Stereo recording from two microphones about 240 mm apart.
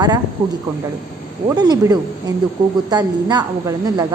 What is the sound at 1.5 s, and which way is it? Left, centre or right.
A woman's voice, centre.